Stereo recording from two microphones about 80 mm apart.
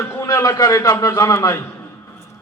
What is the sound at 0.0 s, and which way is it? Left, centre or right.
A man's voice, left.